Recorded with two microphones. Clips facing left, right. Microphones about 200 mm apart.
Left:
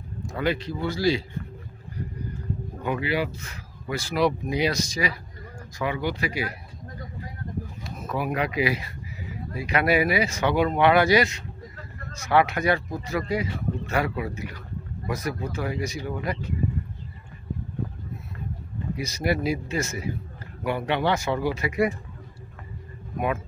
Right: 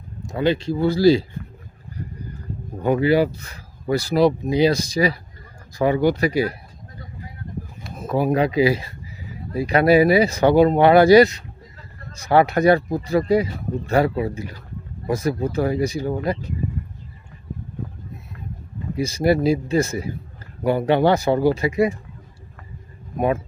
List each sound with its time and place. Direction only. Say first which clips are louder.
0.3 s speech: right 6 dB; 25° right (ahead or behind)
2.8 s speech: right 10 dB; 40° right (ahead or behind)
8.0 s speech: right 8 dB; 30° right (ahead or behind)
18.9 s speech: right 8 dB; 30° right (ahead or behind)
23.1 s speech: right 6 dB; 35° right (ahead or behind)